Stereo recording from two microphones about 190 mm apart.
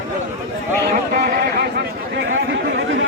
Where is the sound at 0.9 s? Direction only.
55° right (ahead or behind).